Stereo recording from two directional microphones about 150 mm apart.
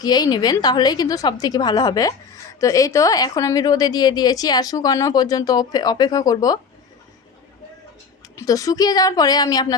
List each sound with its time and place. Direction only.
0.0 s a woman's voice: 25° left (ahead or behind)
8.4 s a woman's voice: 20° left (ahead or behind)